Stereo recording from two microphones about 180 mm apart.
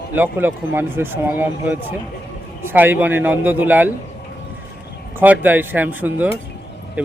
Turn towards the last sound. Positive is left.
turn(degrees=-10)  # may be behind; listen again after turning